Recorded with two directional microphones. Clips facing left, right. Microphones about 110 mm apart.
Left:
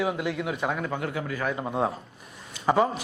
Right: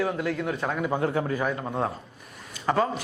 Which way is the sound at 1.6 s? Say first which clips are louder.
Left 2 dB; 10° left (ahead or behind).